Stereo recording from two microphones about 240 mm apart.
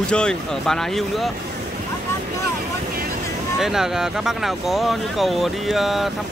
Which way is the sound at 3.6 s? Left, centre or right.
Centre.